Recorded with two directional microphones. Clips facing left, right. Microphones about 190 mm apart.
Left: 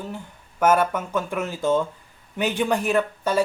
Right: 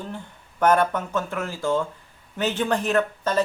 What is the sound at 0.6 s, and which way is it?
A man's voice, 5° left (ahead or behind).